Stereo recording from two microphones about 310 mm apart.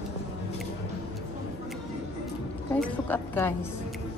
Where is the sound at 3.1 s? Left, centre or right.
Centre.